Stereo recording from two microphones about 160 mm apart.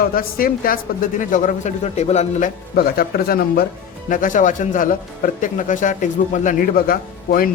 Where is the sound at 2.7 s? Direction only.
70° left (ahead or behind).